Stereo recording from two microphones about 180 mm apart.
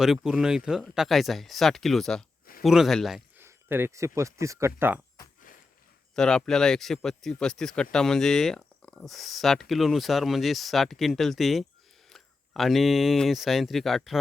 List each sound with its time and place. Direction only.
0.0 s speech: centre (ahead or behind)
3.3 s speech: 10° right (ahead or behind)
6.1 s speech: 5° left (ahead or behind)